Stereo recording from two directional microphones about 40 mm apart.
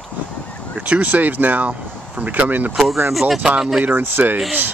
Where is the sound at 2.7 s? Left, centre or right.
Centre.